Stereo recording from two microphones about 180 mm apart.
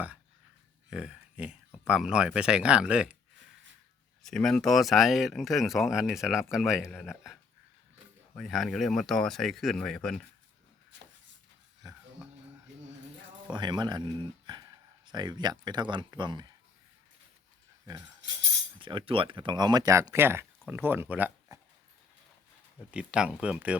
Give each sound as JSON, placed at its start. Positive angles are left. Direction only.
{"t": 0.9, "sound": "speech", "side_deg": -5}
{"t": 4.2, "sound": "speech", "side_deg": 0}
{"t": 8.4, "sound": "speech", "side_deg": 0}
{"t": 13.5, "sound": "speech", "side_deg": -25}
{"t": 18.8, "sound": "speech", "side_deg": -30}
{"t": 22.9, "sound": "speech", "side_deg": -5}